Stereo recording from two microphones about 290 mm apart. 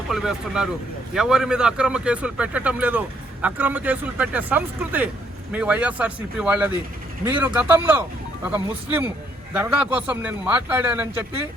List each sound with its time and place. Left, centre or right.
0.1 s speech: centre